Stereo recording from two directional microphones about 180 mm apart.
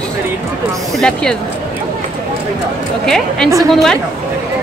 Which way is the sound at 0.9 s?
5° left (ahead or behind).